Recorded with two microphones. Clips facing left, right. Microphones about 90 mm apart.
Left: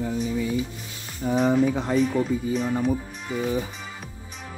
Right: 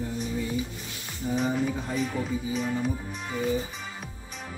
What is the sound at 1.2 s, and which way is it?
Speech, 75° left (ahead or behind).